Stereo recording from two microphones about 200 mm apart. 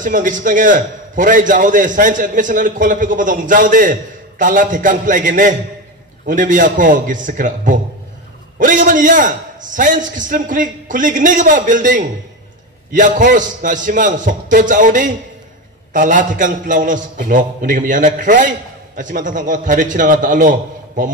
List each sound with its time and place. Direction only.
0.0 s a man's voice: 40° right (ahead or behind)